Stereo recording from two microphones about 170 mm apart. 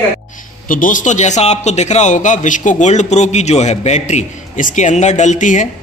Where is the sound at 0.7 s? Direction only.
50° left (ahead or behind).